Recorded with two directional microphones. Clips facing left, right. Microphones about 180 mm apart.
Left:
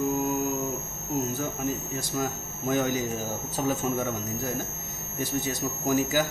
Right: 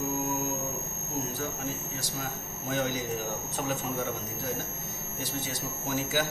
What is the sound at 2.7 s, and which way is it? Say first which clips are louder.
Speech: left 4 dB; 55° left (ahead or behind).